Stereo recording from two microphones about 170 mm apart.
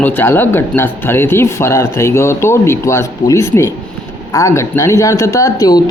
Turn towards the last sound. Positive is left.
turn(degrees=20)  # may be behind; listen again after turning